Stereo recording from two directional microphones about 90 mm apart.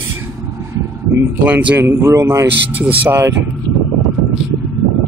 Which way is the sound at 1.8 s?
30° right (ahead or behind).